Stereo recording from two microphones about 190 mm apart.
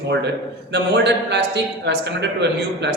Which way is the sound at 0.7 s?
65° right (ahead or behind).